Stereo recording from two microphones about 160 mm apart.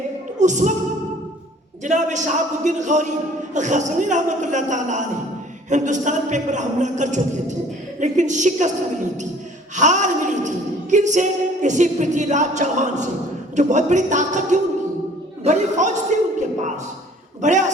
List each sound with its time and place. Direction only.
0.3 s music: 50° right (ahead or behind)
1.8 s a woman's voice: 50° right (ahead or behind)
9.7 s a woman's voice: 50° right (ahead or behind)
15.4 s a sound: 50° right (ahead or behind)
17.4 s a woman's voice: 50° right (ahead or behind)